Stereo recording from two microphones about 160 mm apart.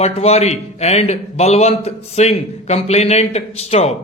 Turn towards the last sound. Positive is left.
turn(degrees=40)  # may be behind; listen again after turning